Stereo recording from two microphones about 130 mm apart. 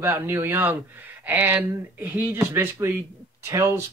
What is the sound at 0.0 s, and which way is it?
Speech, 15° right (ahead or behind).